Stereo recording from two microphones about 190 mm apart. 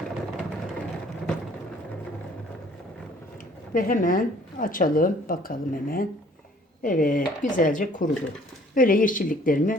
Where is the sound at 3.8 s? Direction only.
45° left (ahead or behind).